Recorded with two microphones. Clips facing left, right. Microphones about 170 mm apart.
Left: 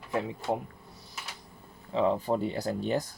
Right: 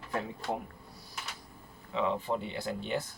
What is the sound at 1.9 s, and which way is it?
Speech, 40° left (ahead or behind).